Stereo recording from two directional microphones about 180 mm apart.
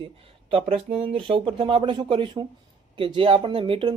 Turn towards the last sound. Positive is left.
turn(degrees=-30)  # may be behind; listen again after turning